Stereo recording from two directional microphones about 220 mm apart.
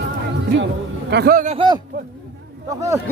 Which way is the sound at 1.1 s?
45° right (ahead or behind).